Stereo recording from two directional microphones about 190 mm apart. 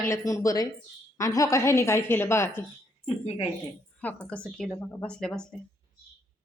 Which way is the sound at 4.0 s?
5° left (ahead or behind).